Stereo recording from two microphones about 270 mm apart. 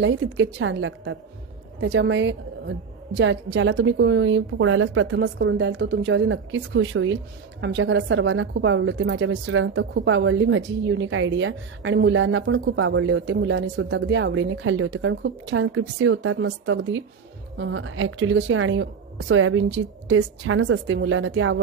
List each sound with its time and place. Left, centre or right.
0.0 s a woman's voice: right